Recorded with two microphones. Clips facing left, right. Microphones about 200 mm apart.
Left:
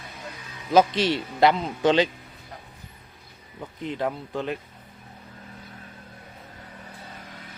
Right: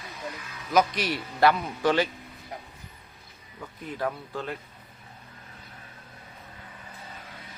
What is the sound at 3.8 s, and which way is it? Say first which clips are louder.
Speech: left 3 dB; 20° left (ahead or behind).